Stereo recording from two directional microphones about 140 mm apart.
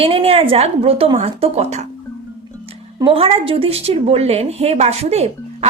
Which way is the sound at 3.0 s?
40° right (ahead or behind).